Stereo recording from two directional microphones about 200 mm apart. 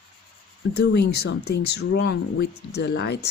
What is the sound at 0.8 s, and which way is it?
Speech, 55° left (ahead or behind).